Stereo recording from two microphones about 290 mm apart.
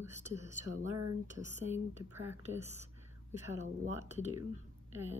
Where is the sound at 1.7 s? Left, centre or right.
Centre.